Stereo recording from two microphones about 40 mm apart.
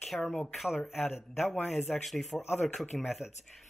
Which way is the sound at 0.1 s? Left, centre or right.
Left.